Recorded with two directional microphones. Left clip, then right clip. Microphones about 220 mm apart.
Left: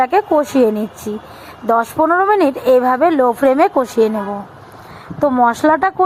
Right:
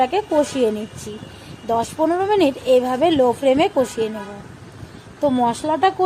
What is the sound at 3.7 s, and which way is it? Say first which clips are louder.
Speech: left 6 dB; 15° left (ahead or behind).